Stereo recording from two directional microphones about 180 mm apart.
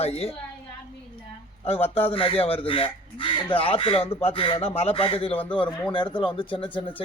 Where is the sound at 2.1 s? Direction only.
30° left (ahead or behind).